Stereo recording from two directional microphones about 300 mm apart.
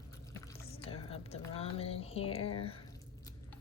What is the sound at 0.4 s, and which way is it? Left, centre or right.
Drip, centre.